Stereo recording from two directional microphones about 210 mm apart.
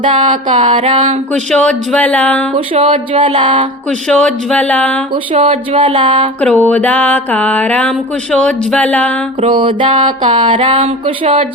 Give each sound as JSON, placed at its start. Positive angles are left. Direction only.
{"t": 0.0, "sound": "music", "side_deg": -20}
{"t": 1.3, "sound": "music", "side_deg": 5}
{"t": 2.5, "sound": "music", "side_deg": -25}
{"t": 4.1, "sound": "speech", "side_deg": 5}
{"t": 5.1, "sound": "music", "side_deg": -25}
{"t": 6.4, "sound": "music", "side_deg": 5}
{"t": 9.4, "sound": "music", "side_deg": -25}